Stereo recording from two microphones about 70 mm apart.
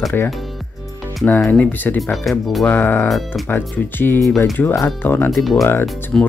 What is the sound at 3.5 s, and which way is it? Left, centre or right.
Speech, left.